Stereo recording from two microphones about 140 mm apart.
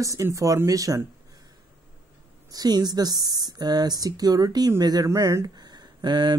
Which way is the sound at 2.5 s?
30° right (ahead or behind).